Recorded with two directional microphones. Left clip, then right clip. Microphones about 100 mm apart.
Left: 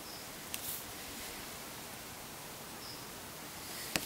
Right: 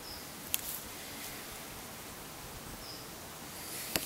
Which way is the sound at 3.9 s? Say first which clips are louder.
Right 1 dB; centre (ahead or behind).